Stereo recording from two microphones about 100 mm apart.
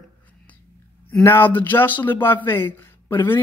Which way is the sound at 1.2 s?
20° left (ahead or behind).